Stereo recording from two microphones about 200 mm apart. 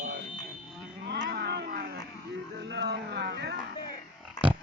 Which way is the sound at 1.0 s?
55° right (ahead or behind).